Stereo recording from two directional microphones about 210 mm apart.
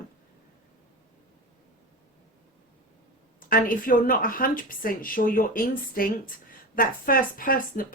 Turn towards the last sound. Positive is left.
turn(degrees=40)  # may be behind; listen again after turning